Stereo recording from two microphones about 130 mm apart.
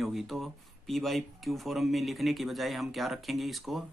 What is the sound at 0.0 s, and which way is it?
Speech, centre (ahead or behind).